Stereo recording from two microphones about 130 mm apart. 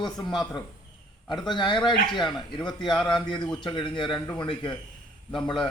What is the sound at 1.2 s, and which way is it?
A man's voice, 35° left (ahead or behind).